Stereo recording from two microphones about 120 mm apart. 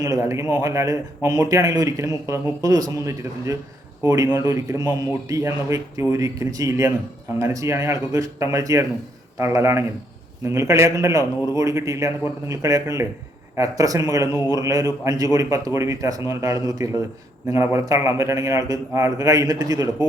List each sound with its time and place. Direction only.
0.0 s speech: 25° right (ahead or behind)